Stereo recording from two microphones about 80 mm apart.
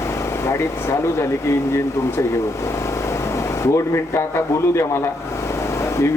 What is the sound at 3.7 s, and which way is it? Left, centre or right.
Speech, left.